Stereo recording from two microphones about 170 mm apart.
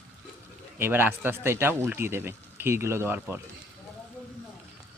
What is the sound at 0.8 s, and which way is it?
Speech, 10° right (ahead or behind).